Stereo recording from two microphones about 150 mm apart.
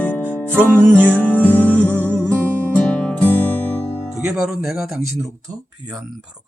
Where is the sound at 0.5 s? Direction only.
15° right (ahead or behind).